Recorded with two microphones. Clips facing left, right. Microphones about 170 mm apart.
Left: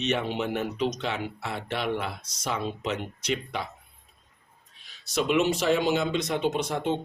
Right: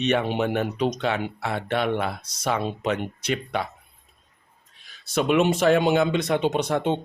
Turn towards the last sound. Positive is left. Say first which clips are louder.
# right 4 dB
turn(degrees=-65)  # may be behind; listen again after turning